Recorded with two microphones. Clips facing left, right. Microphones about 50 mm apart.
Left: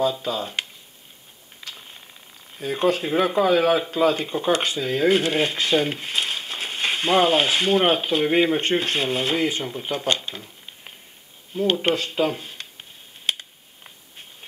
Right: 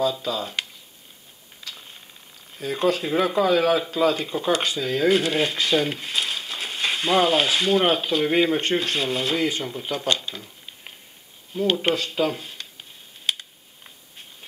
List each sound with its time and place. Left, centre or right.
0.0 s speech: centre
1.6 s a sound: left
2.5 s speech: centre
11.5 s speech: centre
13.3 s computer keyboard: centre